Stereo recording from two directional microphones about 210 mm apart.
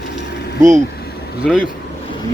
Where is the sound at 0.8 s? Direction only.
50° left (ahead or behind).